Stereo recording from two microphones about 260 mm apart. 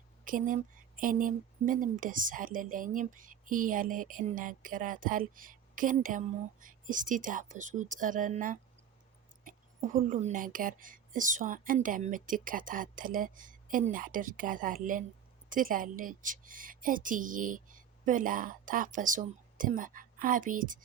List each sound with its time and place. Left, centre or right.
0.3 s speech: right